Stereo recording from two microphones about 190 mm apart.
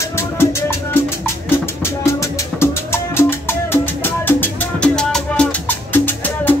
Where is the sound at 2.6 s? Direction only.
15° left (ahead or behind).